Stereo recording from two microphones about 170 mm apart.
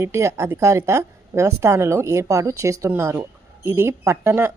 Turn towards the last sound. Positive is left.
turn(degrees=-15)  # may be behind; listen again after turning